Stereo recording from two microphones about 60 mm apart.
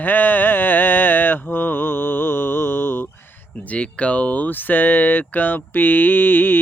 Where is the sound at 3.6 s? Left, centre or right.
Left.